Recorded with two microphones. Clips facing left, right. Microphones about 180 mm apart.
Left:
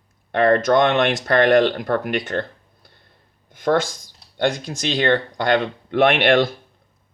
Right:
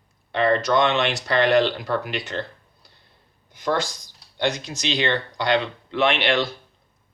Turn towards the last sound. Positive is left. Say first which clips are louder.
# left 5 dB
turn(degrees=50)  # may be behind; listen again after turning